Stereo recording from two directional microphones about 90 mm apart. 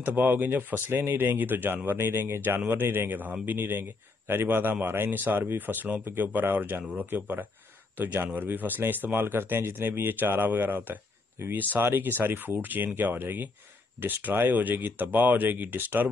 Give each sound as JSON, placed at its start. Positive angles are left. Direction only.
{"t": 0.0, "sound": "speech", "side_deg": -20}